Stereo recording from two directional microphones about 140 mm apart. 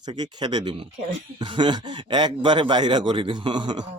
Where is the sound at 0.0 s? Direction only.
30° right (ahead or behind).